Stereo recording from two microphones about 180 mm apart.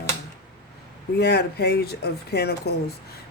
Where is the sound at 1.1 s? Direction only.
65° left (ahead or behind).